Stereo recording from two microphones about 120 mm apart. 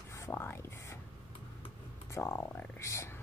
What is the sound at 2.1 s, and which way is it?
Speech, 20° left (ahead or behind).